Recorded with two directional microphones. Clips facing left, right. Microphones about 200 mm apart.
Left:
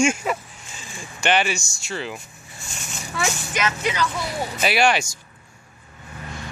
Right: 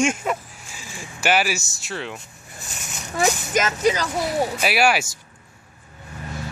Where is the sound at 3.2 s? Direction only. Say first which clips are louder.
Right 5 dB; 40° right (ahead or behind).